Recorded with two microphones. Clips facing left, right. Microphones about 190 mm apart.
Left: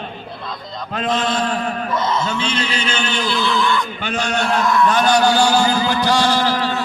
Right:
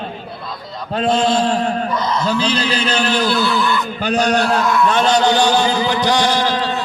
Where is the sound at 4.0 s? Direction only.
35° right (ahead or behind).